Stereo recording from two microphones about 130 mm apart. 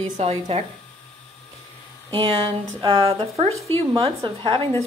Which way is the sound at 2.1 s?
40° right (ahead or behind).